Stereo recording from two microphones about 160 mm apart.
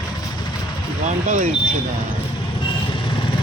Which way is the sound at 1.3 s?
50° right (ahead or behind).